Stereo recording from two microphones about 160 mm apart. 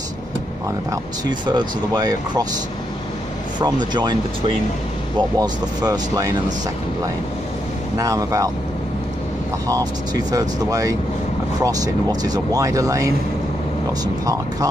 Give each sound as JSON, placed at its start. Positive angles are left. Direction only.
{"t": 1.4, "sound": "speech", "side_deg": -25}
{"t": 3.5, "sound": "speech", "side_deg": -25}
{"t": 5.4, "sound": "speech", "side_deg": -25}
{"t": 8.0, "sound": "speech", "side_deg": -20}
{"t": 9.7, "sound": "speech", "side_deg": -20}